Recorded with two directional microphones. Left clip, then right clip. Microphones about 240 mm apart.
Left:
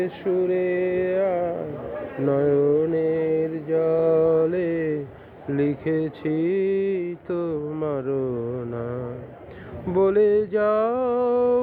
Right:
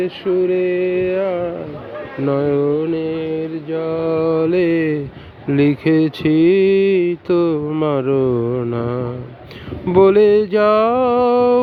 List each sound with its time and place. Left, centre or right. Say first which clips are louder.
0.0 s mantra: right 6 dB; right
2.2 s mantra: right 3 dB; right